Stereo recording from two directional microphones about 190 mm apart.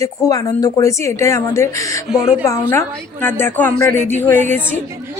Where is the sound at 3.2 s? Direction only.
10° left (ahead or behind).